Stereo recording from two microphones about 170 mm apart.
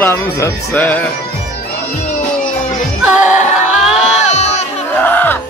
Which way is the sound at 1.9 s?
45° left (ahead or behind).